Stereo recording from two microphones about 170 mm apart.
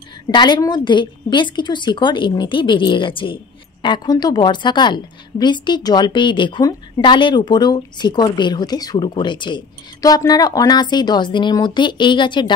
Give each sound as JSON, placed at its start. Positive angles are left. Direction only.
{"t": 0.3, "sound": "a woman's voice", "side_deg": 25}